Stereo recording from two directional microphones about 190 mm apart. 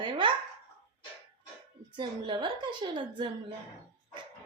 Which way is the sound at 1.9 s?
25° right (ahead or behind).